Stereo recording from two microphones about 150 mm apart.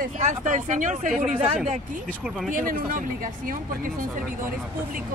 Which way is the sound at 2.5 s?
70° right (ahead or behind).